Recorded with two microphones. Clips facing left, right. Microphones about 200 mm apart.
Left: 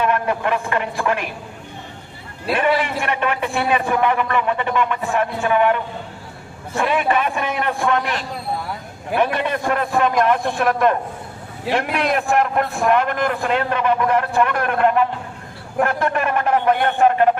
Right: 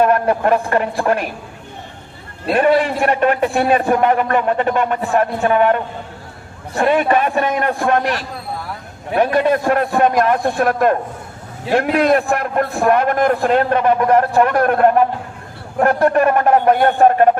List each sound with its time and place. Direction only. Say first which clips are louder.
0.0 s a man's voice: right 6 dB; 40° right (ahead or behind)
2.6 s a man's voice: right 6 dB; 35° right (ahead or behind)
9.1 s a man's voice: right 5 dB; 40° right (ahead or behind)